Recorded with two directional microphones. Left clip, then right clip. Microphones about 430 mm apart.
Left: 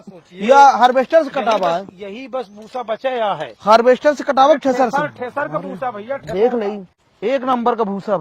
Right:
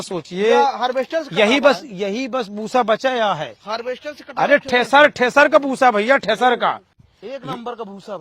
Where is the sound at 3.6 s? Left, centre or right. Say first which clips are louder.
Left 18 dB; left.